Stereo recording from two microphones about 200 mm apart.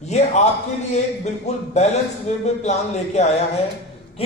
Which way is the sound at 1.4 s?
35° left (ahead or behind).